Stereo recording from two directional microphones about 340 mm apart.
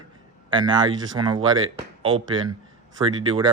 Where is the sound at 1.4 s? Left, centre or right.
Right.